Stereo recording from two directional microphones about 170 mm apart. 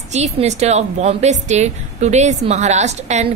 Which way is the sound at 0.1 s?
40° right (ahead or behind).